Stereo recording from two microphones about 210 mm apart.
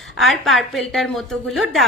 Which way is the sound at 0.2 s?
Centre (ahead or behind).